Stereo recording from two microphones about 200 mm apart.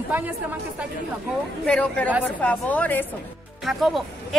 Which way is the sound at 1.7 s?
5° left (ahead or behind).